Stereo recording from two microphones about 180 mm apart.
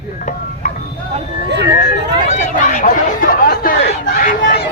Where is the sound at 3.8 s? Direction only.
35° left (ahead or behind).